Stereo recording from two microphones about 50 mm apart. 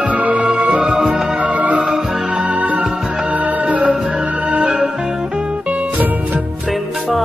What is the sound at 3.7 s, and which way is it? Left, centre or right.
Music, right.